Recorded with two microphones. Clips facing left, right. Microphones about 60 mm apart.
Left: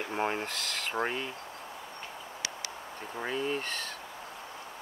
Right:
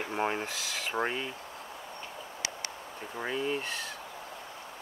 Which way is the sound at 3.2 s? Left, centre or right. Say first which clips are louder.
Even; centre.